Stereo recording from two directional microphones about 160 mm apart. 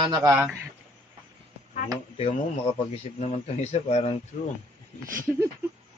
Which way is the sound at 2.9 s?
45° left (ahead or behind).